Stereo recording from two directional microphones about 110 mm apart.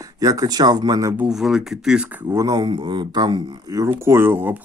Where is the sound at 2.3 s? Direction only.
35° right (ahead or behind).